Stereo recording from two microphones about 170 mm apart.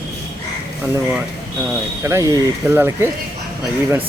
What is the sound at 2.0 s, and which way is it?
Speech, 15° right (ahead or behind).